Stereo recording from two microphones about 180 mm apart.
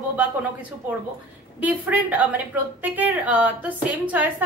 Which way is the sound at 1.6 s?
10° right (ahead or behind).